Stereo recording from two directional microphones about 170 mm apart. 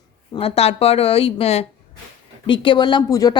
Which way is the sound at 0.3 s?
35° left (ahead or behind).